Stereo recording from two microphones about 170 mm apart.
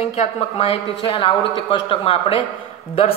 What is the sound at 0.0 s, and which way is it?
A woman's voice, 40° left (ahead or behind).